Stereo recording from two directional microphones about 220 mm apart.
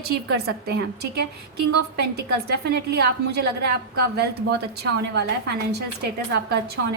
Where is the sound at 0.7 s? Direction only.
45° right (ahead or behind).